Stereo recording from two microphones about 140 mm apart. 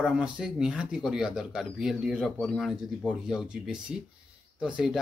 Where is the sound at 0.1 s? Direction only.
5° right (ahead or behind).